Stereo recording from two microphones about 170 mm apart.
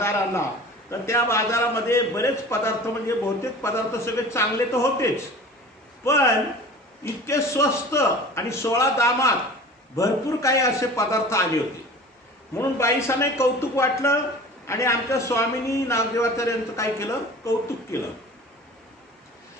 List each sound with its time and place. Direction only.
0.0 s a sound: 15° left (ahead or behind)
0.9 s a man's voice: 15° left (ahead or behind)
12.5 s a man's voice: 15° left (ahead or behind)